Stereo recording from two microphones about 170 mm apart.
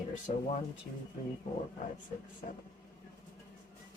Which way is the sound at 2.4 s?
50° left (ahead or behind).